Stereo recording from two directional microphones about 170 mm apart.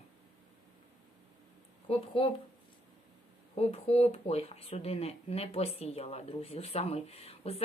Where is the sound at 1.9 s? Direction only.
30° left (ahead or behind).